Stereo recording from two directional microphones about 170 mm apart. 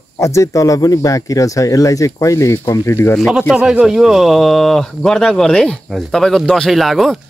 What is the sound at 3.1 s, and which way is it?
Speech, centre (ahead or behind).